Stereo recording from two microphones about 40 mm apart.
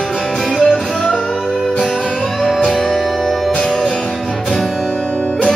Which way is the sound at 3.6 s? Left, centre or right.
Centre.